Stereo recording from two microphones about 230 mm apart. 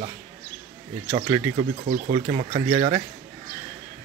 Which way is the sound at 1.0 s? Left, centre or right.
Centre.